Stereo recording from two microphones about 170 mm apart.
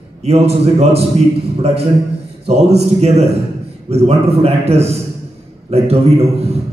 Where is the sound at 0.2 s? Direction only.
35° right (ahead or behind).